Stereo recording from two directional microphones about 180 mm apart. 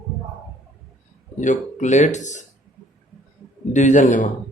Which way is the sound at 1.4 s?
40° left (ahead or behind).